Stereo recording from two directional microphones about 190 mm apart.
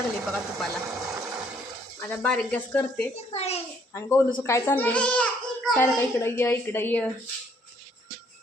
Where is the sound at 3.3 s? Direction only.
35° left (ahead or behind).